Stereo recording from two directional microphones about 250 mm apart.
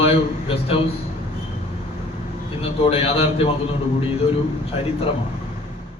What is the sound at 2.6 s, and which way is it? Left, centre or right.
Speech, left.